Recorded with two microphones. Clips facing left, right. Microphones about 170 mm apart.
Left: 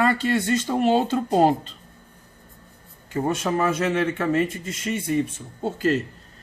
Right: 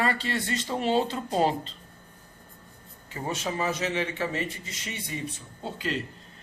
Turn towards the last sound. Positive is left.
turn(degrees=45)  # may be behind; listen again after turning